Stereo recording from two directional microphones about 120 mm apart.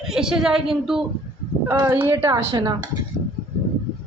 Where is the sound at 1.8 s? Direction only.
20° right (ahead or behind).